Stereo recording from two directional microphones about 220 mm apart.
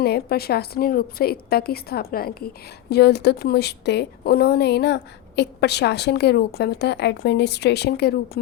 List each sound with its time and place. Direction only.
0.0 s a woman's voice: 45° left (ahead or behind)